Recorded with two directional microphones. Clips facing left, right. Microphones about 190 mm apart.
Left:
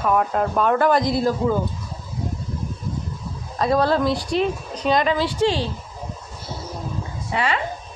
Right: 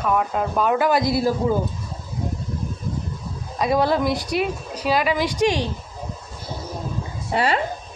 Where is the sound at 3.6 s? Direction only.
15° right (ahead or behind).